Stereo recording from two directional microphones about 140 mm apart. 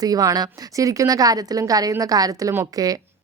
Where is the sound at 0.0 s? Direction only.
25° right (ahead or behind).